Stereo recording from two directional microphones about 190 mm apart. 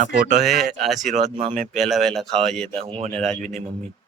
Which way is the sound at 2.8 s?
30° right (ahead or behind).